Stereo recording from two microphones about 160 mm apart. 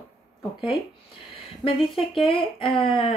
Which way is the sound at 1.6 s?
35° left (ahead or behind).